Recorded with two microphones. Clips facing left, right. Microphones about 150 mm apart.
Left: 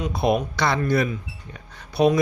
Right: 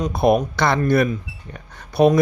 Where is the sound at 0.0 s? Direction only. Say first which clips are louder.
Right 5 dB; 50° right (ahead or behind).